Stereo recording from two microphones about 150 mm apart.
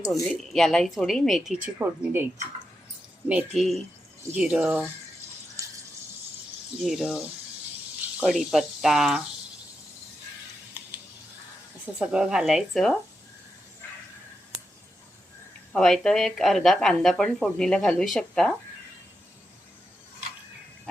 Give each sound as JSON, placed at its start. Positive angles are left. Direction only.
{"t": 0.0, "sound": "speech", "side_deg": 0}
{"t": 1.6, "sound": "a woman's voice", "side_deg": -15}
{"t": 3.2, "sound": "speech", "side_deg": -5}
{"t": 6.7, "sound": "speech", "side_deg": 0}
{"t": 8.2, "sound": "speech", "side_deg": -5}
{"t": 10.8, "sound": "a sound", "side_deg": -10}
{"t": 11.9, "sound": "speech", "side_deg": -5}
{"t": 15.7, "sound": "speech", "side_deg": 5}